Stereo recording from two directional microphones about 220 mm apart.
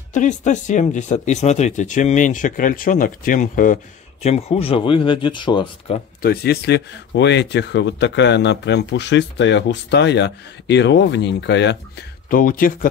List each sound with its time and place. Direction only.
0.1 s speech: 35° left (ahead or behind)
6.2 s speech: 45° left (ahead or behind)
12.3 s speech: 40° left (ahead or behind)